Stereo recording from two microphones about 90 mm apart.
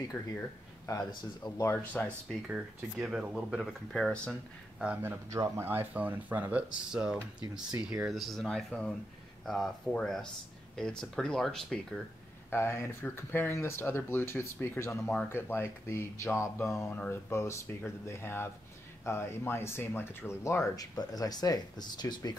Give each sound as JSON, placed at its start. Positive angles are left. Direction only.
{"t": 0.2, "sound": "speech", "side_deg": 15}
{"t": 0.8, "sound": "speech", "side_deg": 40}
{"t": 2.4, "sound": "speech", "side_deg": -10}
{"t": 4.7, "sound": "speech", "side_deg": -15}
{"t": 5.3, "sound": "speech", "side_deg": -35}
{"t": 5.7, "sound": "speech", "side_deg": -20}
{"t": 12.4, "sound": "speech", "side_deg": 30}
{"t": 16.9, "sound": "speech", "side_deg": 20}
{"t": 17.3, "sound": "speech", "side_deg": 30}